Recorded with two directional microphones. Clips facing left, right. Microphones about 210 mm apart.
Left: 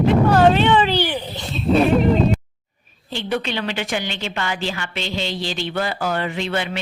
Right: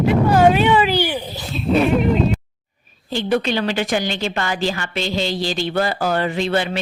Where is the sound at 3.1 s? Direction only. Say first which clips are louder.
Right 5 dB; 40° right (ahead or behind).